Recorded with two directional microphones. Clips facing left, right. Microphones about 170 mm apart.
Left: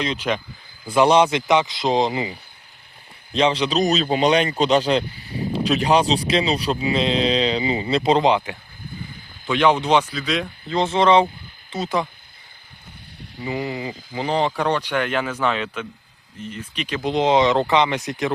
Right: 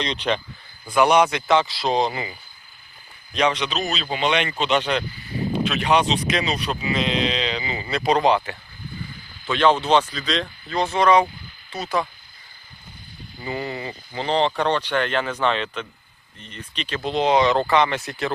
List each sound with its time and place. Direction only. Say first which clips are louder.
0.0 s speech: left 1 dB; 5° left (ahead or behind)
0.9 s speech: left 2 dB; 25° left (ahead or behind)
3.3 s speech: left 3 dB; 30° left (ahead or behind); by 10.8 s 10° left (ahead or behind)
10.8 s speech: left 2 dB; 25° left (ahead or behind)
13.4 s speech: left 3 dB; 10° left (ahead or behind)